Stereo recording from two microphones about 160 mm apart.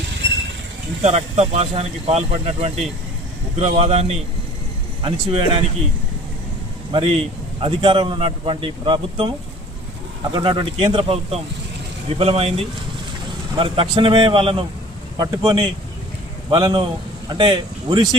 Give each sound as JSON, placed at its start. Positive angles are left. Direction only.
{"t": 1.0, "sound": "speech", "side_deg": -45}
{"t": 6.9, "sound": "speech", "side_deg": -35}
{"t": 10.3, "sound": "speech", "side_deg": -25}